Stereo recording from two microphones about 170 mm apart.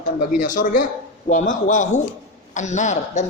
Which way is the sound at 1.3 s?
45° left (ahead or behind).